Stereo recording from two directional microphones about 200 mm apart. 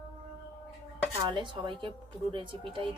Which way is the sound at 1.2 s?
25° right (ahead or behind).